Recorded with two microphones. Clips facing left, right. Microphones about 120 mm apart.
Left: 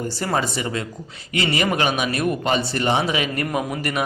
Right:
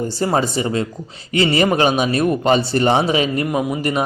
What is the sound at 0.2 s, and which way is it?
A man's voice, 25° right (ahead or behind).